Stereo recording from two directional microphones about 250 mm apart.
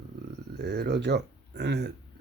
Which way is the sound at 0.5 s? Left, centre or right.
Right.